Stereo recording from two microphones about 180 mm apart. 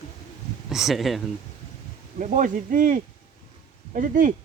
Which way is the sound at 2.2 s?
45° right (ahead or behind).